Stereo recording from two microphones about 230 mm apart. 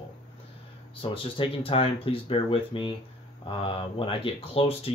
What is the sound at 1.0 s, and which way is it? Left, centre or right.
Speech, left.